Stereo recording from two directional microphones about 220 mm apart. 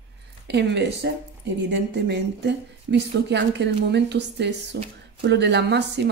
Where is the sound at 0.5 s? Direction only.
50° right (ahead or behind).